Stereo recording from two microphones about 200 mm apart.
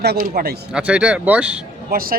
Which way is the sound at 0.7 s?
5° right (ahead or behind).